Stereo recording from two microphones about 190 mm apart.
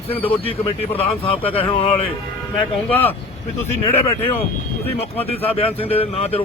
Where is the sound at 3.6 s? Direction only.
35° left (ahead or behind).